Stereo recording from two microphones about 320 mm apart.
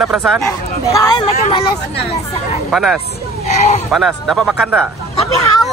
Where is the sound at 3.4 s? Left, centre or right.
Left.